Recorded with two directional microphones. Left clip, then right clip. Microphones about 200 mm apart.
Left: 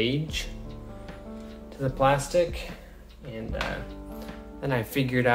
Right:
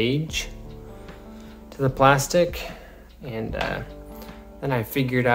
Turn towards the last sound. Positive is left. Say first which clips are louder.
# right 2 dB
turn(degrees=-20)  # may be behind; listen again after turning